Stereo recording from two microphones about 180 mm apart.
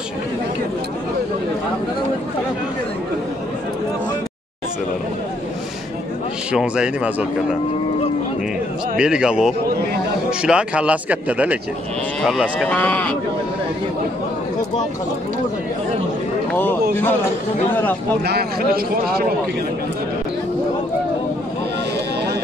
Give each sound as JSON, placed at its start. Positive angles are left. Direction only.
{"t": 6.5, "sound": "speech", "side_deg": -5}
{"t": 8.9, "sound": "speech", "side_deg": -5}
{"t": 18.2, "sound": "a man's voice", "side_deg": -60}